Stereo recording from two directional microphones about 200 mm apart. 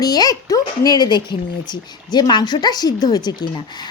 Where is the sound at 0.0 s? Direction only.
20° left (ahead or behind).